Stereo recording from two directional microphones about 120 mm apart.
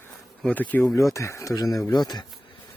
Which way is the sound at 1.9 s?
35° left (ahead or behind).